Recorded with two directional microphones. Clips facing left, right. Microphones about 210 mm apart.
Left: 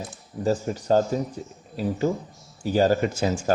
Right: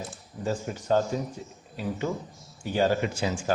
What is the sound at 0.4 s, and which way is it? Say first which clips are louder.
Speech: left 5 dB; 40° left (ahead or behind).